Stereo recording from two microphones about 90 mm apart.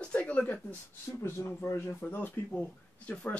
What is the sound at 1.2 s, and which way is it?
A man's voice, 25° left (ahead or behind).